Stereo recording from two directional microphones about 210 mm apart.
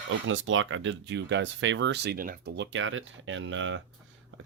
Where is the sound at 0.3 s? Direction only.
70° right (ahead or behind).